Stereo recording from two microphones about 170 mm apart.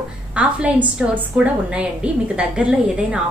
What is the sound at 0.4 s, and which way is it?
A woman's voice, 5° right (ahead or behind).